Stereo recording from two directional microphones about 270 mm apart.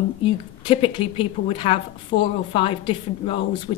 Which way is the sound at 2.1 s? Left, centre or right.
Left.